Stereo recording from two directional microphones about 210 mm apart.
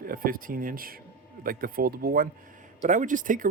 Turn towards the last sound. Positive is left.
turn(degrees=-40)  # may be behind; listen again after turning